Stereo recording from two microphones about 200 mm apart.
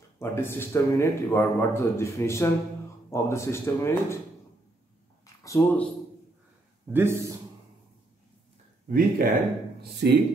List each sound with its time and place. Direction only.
0.2 s a man's voice: 10° left (ahead or behind)
5.2 s a sound: 15° left (ahead or behind)
6.9 s a man's voice: 10° right (ahead or behind)
8.8 s speech: 45° right (ahead or behind)
9.9 s speech: 55° right (ahead or behind)